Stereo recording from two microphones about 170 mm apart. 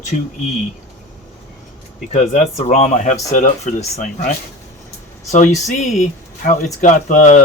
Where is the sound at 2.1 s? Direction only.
45° left (ahead or behind).